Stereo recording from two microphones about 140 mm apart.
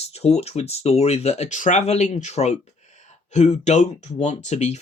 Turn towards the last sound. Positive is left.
turn(degrees=55)  # may be behind; listen again after turning